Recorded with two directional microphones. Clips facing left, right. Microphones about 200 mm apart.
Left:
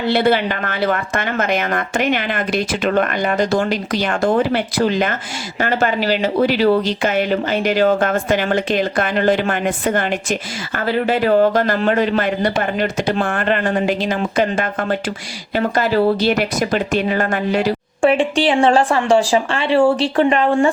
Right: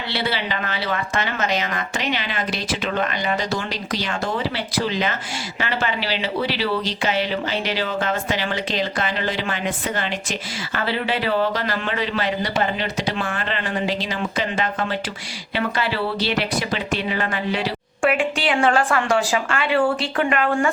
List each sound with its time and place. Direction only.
0.0 s a woman's voice: 50° left (ahead or behind)
18.0 s a woman's voice: 30° left (ahead or behind)